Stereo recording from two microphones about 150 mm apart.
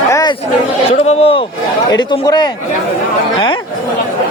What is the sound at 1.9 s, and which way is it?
Speech, 25° left (ahead or behind).